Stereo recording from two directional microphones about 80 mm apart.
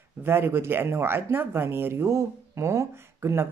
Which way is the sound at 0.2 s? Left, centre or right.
Right.